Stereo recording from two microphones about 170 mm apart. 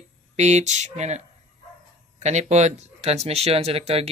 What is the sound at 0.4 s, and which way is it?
Speech, 40° right (ahead or behind).